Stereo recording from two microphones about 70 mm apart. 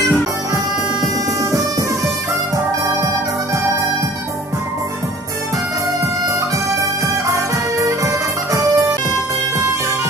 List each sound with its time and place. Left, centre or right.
1.0 s music: right
7.2 s music: right